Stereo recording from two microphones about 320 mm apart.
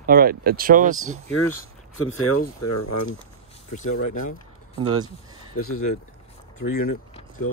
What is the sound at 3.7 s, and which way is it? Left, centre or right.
Speech, left.